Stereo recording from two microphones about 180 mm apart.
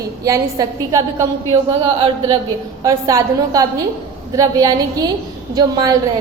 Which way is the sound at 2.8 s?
20° right (ahead or behind).